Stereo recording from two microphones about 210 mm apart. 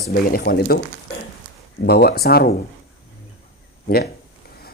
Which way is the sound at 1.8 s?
50° left (ahead or behind).